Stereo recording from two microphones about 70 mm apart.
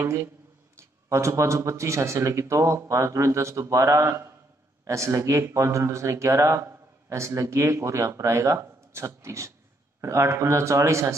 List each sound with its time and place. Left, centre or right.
0.0 s speech: right